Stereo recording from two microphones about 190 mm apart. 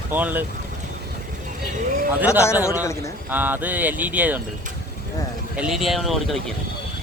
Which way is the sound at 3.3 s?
10° right (ahead or behind).